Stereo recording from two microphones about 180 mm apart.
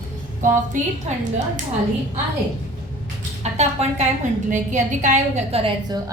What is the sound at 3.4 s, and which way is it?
A woman's voice, 35° right (ahead or behind).